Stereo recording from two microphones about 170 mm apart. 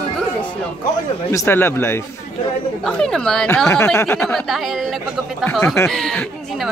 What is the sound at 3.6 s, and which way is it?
Speech, 15° left (ahead or behind).